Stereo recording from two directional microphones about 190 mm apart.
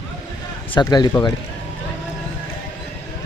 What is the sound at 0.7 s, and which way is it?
Speech, 20° left (ahead or behind).